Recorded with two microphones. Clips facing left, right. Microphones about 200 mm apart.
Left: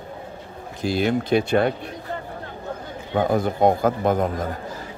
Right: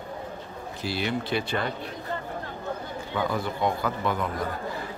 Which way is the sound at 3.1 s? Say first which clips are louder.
Left 8 dB; 50° left (ahead or behind).